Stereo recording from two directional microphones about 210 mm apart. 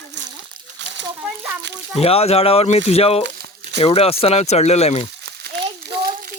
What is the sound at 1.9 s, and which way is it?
Speech, 30° left (ahead or behind).